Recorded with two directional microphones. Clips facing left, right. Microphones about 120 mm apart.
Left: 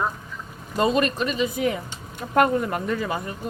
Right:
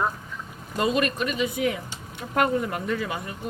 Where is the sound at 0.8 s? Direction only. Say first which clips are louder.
Left 3 dB; 30° left (ahead or behind).